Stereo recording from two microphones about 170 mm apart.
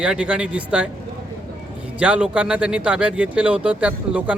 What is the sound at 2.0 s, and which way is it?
A man's voice, 5° right (ahead or behind).